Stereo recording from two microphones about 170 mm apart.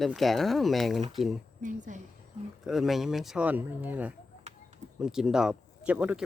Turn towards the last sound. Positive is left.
turn(degrees=-10)  # may be behind; listen again after turning